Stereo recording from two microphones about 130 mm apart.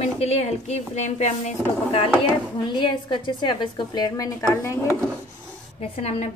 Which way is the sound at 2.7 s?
35° left (ahead or behind).